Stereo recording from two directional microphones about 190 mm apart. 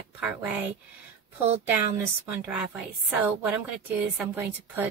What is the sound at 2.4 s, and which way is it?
Speech, 5° right (ahead or behind).